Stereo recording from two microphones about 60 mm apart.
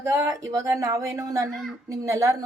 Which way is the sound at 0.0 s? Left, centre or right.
Right.